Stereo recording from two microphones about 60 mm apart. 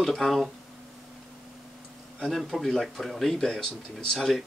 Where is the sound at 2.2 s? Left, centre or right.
Centre.